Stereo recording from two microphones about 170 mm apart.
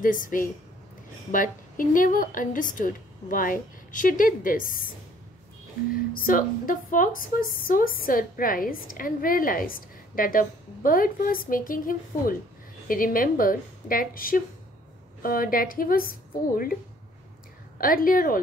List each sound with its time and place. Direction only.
0.0 s a woman's voice: 55° left (ahead or behind)
6.1 s a woman's voice: 55° left (ahead or behind)
17.7 s a woman's voice: 55° left (ahead or behind)